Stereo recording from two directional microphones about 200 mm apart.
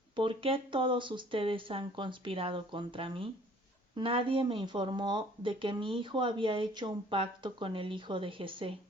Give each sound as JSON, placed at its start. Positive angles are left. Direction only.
{"t": 0.2, "sound": "speech", "side_deg": -25}